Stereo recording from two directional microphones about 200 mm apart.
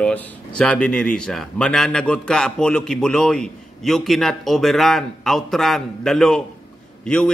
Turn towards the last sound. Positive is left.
turn(degrees=5)  # may be behind; listen again after turning